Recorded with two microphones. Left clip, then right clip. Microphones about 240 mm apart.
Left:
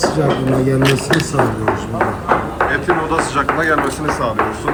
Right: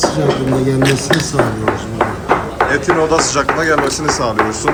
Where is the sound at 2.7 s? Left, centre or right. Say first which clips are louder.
Right 5 dB; centre.